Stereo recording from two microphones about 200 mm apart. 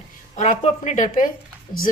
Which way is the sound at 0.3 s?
35° left (ahead or behind).